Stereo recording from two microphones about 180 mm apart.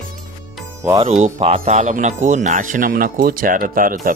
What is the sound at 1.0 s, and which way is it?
Speech, 35° right (ahead or behind).